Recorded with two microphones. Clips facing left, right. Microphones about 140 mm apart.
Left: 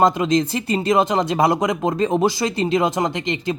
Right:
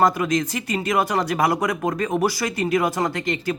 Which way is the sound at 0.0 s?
25° left (ahead or behind).